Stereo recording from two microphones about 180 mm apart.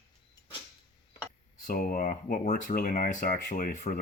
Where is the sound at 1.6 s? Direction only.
50° left (ahead or behind).